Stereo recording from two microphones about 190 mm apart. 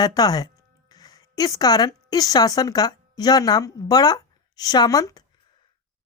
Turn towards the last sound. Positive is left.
turn(degrees=20)  # may be behind; listen again after turning